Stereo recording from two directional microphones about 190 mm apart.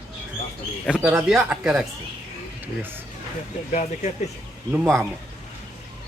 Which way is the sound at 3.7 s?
40° left (ahead or behind).